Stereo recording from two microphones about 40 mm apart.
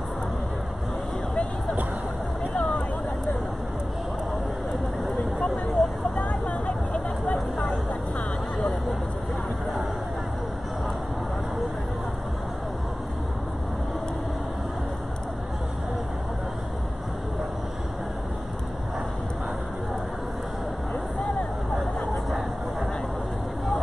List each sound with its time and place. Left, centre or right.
5.4 s vehicle: centre
6.1 s a sound: left
21.7 s vehicle: centre